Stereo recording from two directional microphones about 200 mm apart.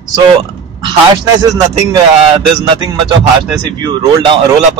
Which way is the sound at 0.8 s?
20° right (ahead or behind).